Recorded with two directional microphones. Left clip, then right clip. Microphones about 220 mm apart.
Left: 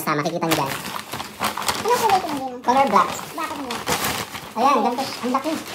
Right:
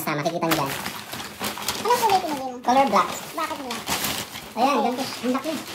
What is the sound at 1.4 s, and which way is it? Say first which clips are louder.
Horse: left 6 dB; 20° left (ahead or behind).